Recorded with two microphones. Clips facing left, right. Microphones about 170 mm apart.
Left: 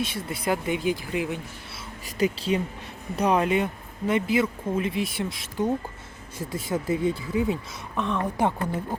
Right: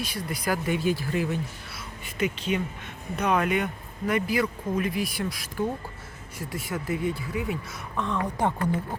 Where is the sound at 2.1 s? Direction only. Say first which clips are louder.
Left 3 dB; 35° left (ahead or behind).